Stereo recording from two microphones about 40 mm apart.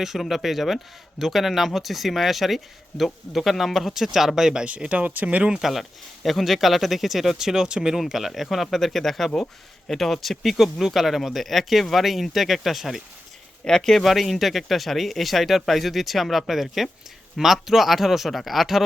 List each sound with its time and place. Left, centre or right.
0.2 s speech: centre
4.9 s speech: right
5.5 s speech: centre
6.2 s speech: centre
7.9 s speech: centre
13.7 s speech: centre
14.0 s speech: centre